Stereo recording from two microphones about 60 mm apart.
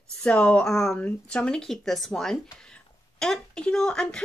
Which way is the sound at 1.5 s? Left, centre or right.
Centre.